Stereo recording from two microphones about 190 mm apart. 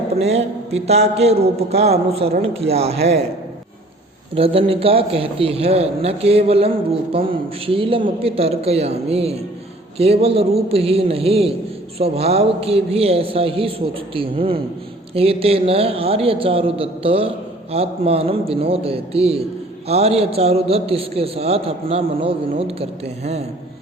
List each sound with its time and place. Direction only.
0.2 s a man's voice: 35° right (ahead or behind)
4.4 s a man's voice: 30° right (ahead or behind)